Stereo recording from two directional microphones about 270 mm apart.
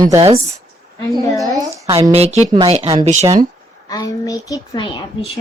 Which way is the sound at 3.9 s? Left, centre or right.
Centre.